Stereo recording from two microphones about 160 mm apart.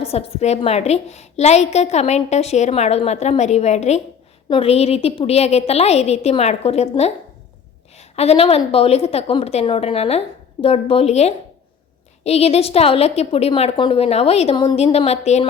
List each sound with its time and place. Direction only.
0.0 s a woman's voice: 40° left (ahead or behind)
14.9 s a woman's voice: 40° left (ahead or behind)